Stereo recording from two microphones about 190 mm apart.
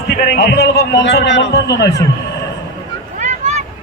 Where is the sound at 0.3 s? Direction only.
60° left (ahead or behind).